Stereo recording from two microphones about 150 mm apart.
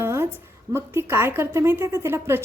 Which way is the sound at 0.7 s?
15° right (ahead or behind).